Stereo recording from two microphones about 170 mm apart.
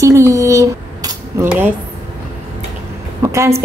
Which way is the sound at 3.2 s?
15° right (ahead or behind).